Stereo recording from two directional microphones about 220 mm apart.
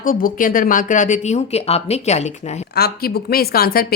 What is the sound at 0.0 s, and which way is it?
Speech, 40° left (ahead or behind).